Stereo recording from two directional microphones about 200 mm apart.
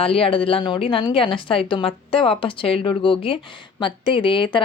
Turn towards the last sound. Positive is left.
turn(degrees=25)  # may be behind; listen again after turning